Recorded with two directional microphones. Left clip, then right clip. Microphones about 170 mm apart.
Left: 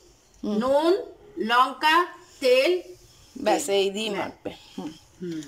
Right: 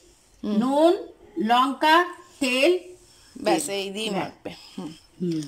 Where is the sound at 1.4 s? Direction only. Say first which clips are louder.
Right 1 dB; 55° right (ahead or behind).